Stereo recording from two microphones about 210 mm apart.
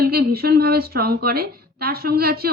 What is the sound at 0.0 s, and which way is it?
A woman's voice, 45° right (ahead or behind).